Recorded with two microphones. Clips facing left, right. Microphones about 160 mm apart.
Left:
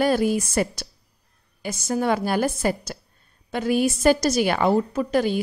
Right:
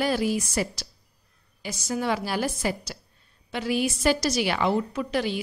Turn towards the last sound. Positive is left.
turn(degrees=45)  # may be behind; listen again after turning